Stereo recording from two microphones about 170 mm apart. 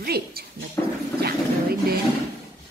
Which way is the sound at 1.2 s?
65° right (ahead or behind).